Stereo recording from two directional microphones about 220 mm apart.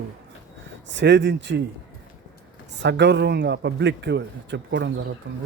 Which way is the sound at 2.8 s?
50° right (ahead or behind).